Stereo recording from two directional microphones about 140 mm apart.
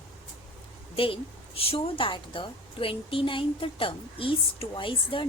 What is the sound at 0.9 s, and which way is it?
A woman's voice, 40° left (ahead or behind).